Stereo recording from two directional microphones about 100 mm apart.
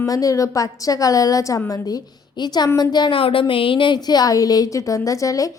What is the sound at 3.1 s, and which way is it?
A woman's voice, 65° left (ahead or behind).